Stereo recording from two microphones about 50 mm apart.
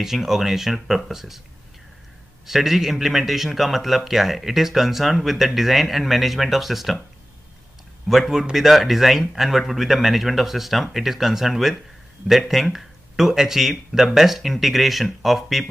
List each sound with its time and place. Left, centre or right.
0.0 s a man's voice: centre
2.4 s a man's voice: centre
8.1 s a man's voice: centre